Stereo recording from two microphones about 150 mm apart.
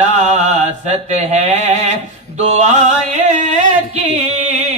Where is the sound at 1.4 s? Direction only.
50° right (ahead or behind).